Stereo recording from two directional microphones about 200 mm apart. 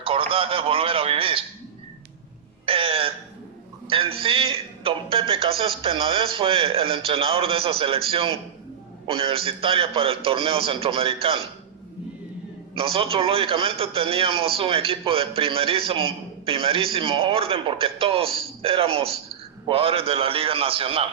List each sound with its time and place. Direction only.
0.0 s a man's voice: 25° right (ahead or behind)
2.6 s music: 25° right (ahead or behind)
3.8 s a man's voice: 25° right (ahead or behind)
12.7 s a man's voice: 25° right (ahead or behind)